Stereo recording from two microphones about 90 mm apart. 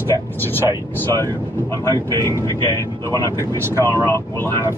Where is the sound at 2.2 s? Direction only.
35° left (ahead or behind).